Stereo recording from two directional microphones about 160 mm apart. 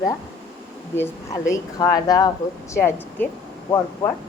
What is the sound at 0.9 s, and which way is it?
A woman's voice, 20° left (ahead or behind).